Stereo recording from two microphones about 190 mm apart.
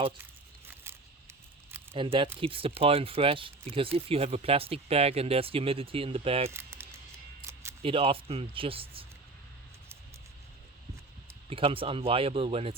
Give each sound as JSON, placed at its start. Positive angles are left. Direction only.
{"t": 1.9, "sound": "speech", "side_deg": -30}
{"t": 6.5, "sound": "a sound", "side_deg": -15}
{"t": 7.8, "sound": "speech", "side_deg": -30}
{"t": 11.4, "sound": "speech", "side_deg": -30}